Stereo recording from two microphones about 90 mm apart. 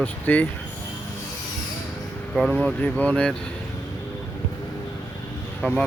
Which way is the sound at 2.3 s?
Centre (ahead or behind).